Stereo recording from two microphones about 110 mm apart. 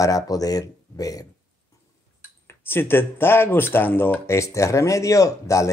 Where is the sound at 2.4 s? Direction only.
20° left (ahead or behind).